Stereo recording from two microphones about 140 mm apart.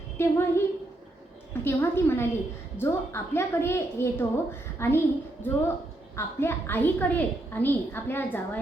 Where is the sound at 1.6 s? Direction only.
15° left (ahead or behind).